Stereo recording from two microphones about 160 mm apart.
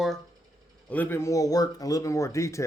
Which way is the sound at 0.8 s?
10° left (ahead or behind).